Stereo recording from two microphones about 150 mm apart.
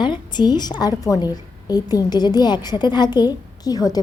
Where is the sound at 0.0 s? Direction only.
30° left (ahead or behind).